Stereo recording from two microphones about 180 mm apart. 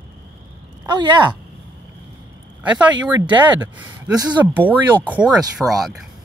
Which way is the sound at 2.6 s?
5° right (ahead or behind).